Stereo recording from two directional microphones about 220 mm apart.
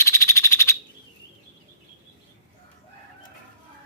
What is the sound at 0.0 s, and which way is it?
Frog, 15° left (ahead or behind).